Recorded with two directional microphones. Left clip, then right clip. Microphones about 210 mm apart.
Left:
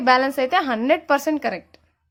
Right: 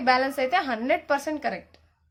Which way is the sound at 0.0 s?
35° left (ahead or behind).